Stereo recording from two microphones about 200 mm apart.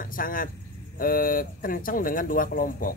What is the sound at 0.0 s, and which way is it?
Vehicle, 45° left (ahead or behind).